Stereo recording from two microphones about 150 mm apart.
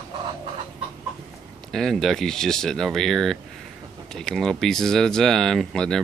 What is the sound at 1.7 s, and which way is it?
Speech, 5° left (ahead or behind).